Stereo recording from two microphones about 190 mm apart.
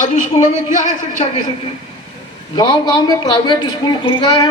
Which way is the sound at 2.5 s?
20° left (ahead or behind).